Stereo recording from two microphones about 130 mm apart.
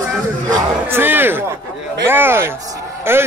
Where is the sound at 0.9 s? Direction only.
15° right (ahead or behind).